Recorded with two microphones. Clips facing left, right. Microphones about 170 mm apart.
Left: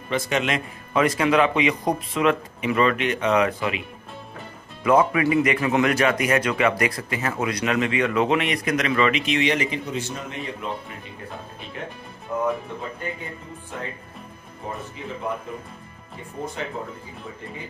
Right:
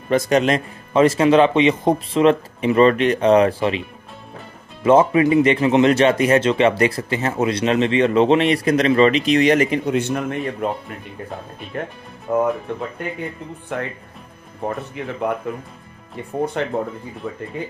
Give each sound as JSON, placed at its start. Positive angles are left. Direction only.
{"t": 0.1, "sound": "a man's voice", "side_deg": -40}
{"t": 4.8, "sound": "a man's voice", "side_deg": -25}
{"t": 12.3, "sound": "speech", "side_deg": -65}
{"t": 13.7, "sound": "speech", "side_deg": -70}